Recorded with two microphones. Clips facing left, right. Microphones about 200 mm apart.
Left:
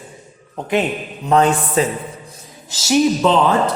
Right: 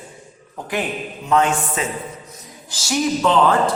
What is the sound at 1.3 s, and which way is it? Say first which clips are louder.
Speech: left 3 dB; 35° left (ahead or behind).